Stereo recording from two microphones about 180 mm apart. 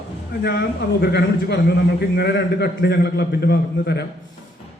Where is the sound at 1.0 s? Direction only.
70° left (ahead or behind).